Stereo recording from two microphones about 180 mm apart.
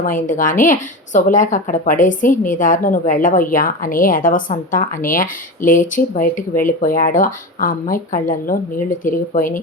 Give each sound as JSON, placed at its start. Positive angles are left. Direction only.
{"t": 0.0, "sound": "a woman's voice", "side_deg": 45}